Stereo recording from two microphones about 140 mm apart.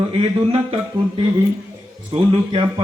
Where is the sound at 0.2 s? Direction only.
40° right (ahead or behind).